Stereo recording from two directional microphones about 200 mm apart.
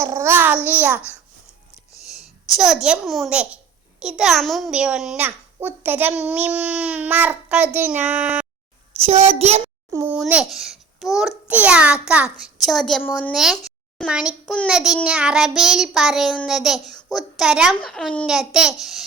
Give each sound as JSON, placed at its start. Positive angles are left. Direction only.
{"t": 0.0, "sound": "a child's voice", "side_deg": -15}
{"t": 2.6, "sound": "child singing", "side_deg": 0}
{"t": 4.0, "sound": "a child's voice", "side_deg": 0}
{"t": 9.0, "sound": "a child's voice", "side_deg": -30}
{"t": 9.9, "sound": "a child's voice", "side_deg": -10}
{"t": 11.4, "sound": "child singing", "side_deg": -10}